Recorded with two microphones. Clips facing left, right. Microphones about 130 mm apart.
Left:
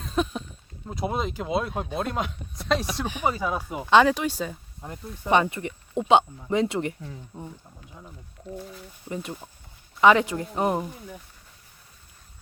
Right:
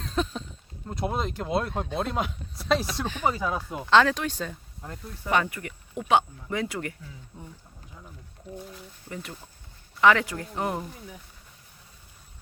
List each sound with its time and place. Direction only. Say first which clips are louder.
0.0 s a sound: left 2 dB; 10° left (ahead or behind)
0.9 s speech: left 1 dB; centre (ahead or behind)
3.0 s speech: left 1 dB; 10° left (ahead or behind)
8.5 s speech: left 2 dB; centre (ahead or behind)
9.0 s speech: left 6 dB; 20° left (ahead or behind)
10.8 s speech: left 3 dB; centre (ahead or behind)